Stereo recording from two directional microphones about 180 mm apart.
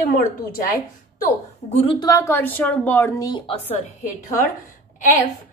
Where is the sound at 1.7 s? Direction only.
30° left (ahead or behind).